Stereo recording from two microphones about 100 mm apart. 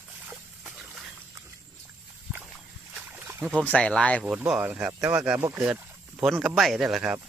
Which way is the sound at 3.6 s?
10° left (ahead or behind).